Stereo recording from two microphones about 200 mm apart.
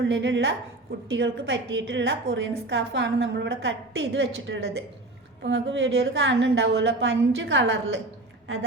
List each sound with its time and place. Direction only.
0.1 s a woman's voice: 65° right (ahead or behind)